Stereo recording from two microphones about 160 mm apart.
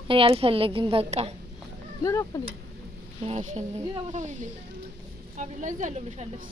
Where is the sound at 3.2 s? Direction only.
45° right (ahead or behind).